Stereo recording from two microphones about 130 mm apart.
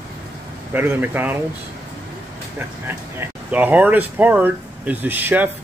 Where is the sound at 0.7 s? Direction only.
15° right (ahead or behind).